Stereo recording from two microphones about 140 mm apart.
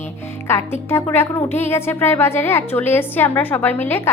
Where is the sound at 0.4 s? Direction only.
15° left (ahead or behind).